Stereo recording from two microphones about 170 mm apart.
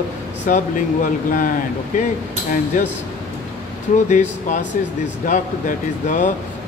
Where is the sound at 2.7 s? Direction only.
50° left (ahead or behind).